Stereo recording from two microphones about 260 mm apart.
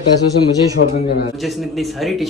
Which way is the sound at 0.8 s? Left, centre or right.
Left.